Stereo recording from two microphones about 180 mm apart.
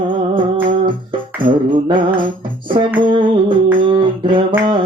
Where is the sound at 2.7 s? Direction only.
25° right (ahead or behind).